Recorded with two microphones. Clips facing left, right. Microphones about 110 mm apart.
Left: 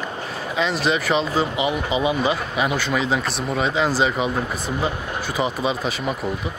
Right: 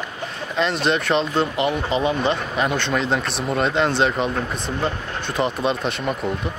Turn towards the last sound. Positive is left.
turn(degrees=0)  # may be behind; listen again after turning